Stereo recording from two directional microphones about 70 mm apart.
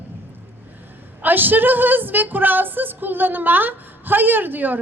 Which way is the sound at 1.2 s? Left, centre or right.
Right.